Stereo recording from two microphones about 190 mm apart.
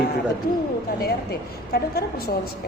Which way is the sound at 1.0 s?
55° left (ahead or behind).